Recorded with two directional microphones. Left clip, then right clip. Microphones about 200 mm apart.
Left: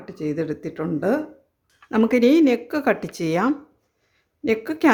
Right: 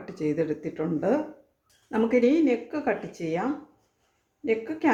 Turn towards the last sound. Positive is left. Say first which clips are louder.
# left 6 dB
turn(degrees=45)  # may be behind; listen again after turning